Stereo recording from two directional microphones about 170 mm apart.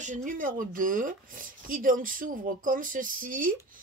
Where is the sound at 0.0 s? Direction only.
50° right (ahead or behind).